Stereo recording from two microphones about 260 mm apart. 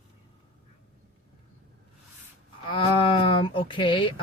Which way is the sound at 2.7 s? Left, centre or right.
Centre.